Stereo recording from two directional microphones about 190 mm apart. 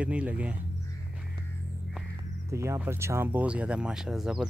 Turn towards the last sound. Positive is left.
turn(degrees=-5)  # may be behind; listen again after turning